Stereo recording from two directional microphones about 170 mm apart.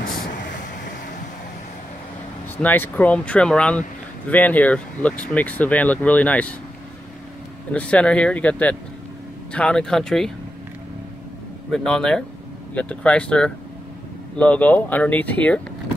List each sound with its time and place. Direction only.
0.0 s vehicle: 60° left (ahead or behind)
2.5 s speech: 10° left (ahead or behind)
7.7 s speech: 5° left (ahead or behind)
11.7 s speech: 5° left (ahead or behind)